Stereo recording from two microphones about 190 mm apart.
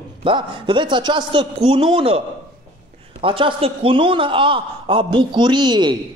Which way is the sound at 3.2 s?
25° right (ahead or behind).